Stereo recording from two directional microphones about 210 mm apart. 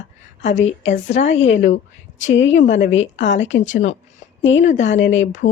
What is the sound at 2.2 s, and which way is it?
Speech, 65° left (ahead or behind).